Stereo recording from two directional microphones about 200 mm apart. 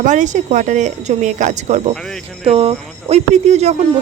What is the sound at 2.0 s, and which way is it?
Speech, centre (ahead or behind).